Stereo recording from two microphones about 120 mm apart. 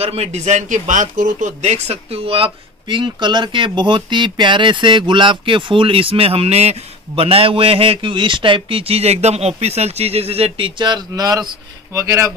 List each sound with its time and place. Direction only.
0.0 s speech: 60° right (ahead or behind)
10.8 s speech: 35° right (ahead or behind)